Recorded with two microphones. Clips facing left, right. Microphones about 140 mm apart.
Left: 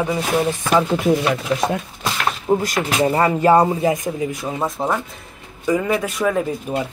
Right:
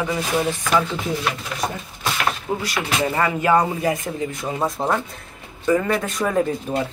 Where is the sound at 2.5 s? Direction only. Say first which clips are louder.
Left 5 dB; 45° left (ahead or behind).